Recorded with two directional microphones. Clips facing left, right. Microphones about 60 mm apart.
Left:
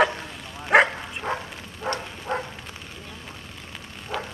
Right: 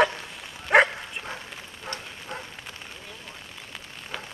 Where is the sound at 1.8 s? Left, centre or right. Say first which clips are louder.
Left 9 dB; left.